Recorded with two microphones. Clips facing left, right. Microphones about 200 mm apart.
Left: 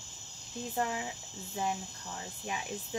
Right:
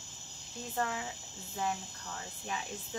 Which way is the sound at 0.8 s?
15° left (ahead or behind).